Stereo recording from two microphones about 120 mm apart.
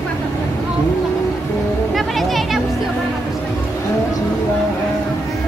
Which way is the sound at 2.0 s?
Centre (ahead or behind).